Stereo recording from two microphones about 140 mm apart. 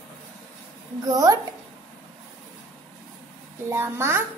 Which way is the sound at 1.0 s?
25° right (ahead or behind).